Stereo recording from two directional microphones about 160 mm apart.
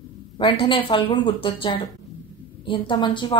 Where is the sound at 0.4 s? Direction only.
30° left (ahead or behind).